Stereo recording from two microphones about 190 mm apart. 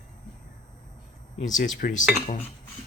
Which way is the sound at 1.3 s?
40° left (ahead or behind).